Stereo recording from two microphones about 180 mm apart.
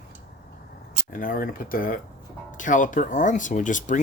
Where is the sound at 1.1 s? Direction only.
50° left (ahead or behind).